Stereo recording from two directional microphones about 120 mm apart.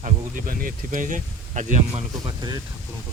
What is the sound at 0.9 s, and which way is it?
Speech, 90° right.